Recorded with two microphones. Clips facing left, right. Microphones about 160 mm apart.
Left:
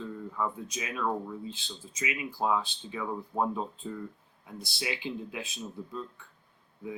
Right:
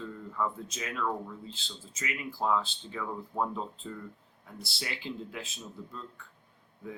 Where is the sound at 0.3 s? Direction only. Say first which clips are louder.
Right 1 dB; 15° left (ahead or behind).